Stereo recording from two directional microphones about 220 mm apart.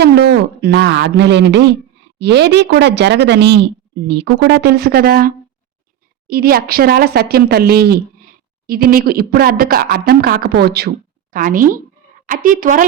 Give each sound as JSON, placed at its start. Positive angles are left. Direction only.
{"t": 0.0, "sound": "a woman's voice", "side_deg": -50}